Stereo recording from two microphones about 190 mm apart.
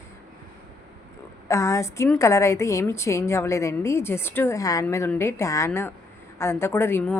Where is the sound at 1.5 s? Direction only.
15° left (ahead or behind).